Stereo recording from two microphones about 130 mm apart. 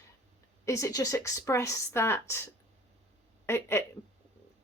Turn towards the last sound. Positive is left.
turn(degrees=20)  # may be behind; listen again after turning